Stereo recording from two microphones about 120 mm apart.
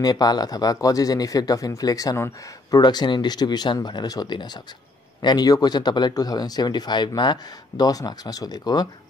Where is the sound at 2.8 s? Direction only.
35° left (ahead or behind).